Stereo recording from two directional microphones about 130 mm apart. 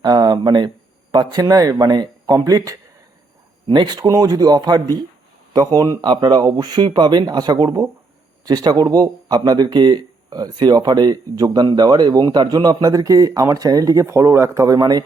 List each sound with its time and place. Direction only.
0.0 s speech: 30° right (ahead or behind)